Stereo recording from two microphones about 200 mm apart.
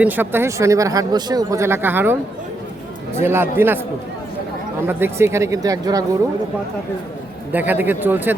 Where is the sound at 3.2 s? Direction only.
10° right (ahead or behind).